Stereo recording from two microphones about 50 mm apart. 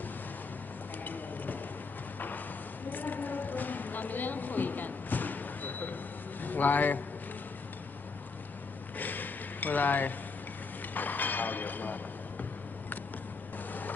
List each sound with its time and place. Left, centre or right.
1.0 s a sound: left
6.4 s a man's voice: left
8.9 s chink: left
11.0 s speech: left